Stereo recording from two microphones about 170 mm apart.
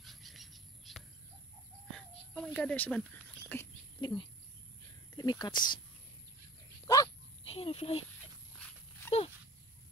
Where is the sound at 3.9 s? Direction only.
25° left (ahead or behind).